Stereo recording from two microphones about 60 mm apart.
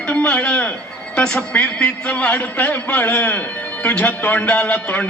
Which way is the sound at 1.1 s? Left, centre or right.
Centre.